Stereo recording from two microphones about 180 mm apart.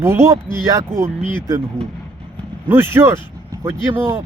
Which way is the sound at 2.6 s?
10° right (ahead or behind).